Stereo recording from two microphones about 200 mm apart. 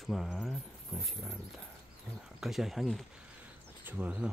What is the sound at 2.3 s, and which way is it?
Speech, centre (ahead or behind).